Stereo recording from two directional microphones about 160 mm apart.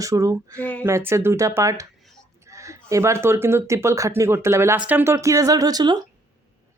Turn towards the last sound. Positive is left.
turn(degrees=-25)  # may be behind; listen again after turning